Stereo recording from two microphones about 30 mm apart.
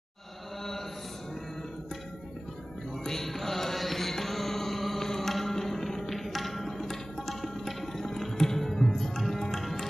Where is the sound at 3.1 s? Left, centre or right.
Centre.